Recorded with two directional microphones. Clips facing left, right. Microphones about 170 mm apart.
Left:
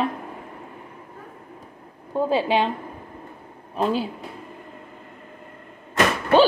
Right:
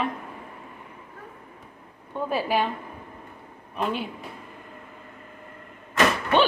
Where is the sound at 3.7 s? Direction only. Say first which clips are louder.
Left 5 dB; 35° left (ahead or behind).